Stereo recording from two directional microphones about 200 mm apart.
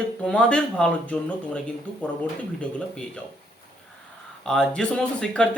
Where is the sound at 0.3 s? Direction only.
5° left (ahead or behind).